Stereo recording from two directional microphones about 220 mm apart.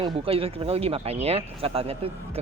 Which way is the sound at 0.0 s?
25° right (ahead or behind).